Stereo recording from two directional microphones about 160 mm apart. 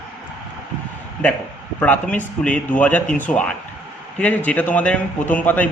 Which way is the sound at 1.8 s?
10° left (ahead or behind).